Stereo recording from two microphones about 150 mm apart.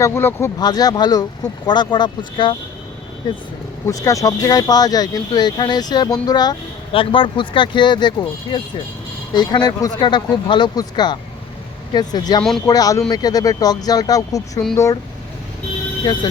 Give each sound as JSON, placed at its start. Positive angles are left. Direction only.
{"t": 0.0, "sound": "speech", "side_deg": 15}
{"t": 0.6, "sound": "speech", "side_deg": 25}
{"t": 12.4, "sound": "speech", "side_deg": 5}
{"t": 12.6, "sound": "speech", "side_deg": 25}
{"t": 16.1, "sound": "speech", "side_deg": 30}